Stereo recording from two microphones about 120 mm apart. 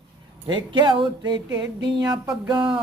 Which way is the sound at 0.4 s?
40° right (ahead or behind).